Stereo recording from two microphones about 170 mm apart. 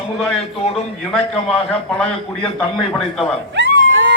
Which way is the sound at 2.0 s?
5° left (ahead or behind).